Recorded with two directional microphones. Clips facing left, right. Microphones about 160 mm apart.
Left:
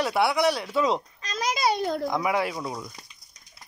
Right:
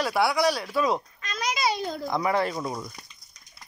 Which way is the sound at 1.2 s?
35° left (ahead or behind).